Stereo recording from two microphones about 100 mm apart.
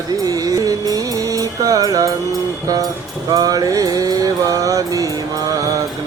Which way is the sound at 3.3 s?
40° right (ahead or behind).